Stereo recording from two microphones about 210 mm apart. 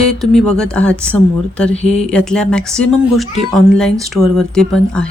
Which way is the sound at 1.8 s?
30° left (ahead or behind).